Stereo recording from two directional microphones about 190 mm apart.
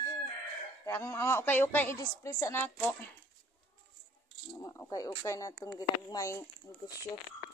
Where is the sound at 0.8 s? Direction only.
10° left (ahead or behind).